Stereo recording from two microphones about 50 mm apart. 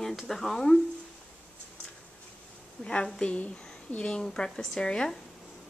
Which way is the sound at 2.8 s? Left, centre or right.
Left.